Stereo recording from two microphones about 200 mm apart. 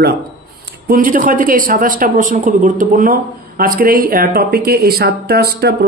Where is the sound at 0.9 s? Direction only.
45° right (ahead or behind).